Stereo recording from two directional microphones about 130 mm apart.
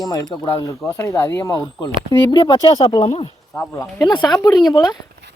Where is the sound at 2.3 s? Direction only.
35° left (ahead or behind).